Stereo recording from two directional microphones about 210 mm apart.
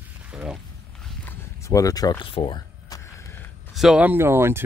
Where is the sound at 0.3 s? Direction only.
5° right (ahead or behind).